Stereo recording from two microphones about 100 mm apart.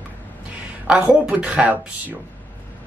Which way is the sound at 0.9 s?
10° right (ahead or behind).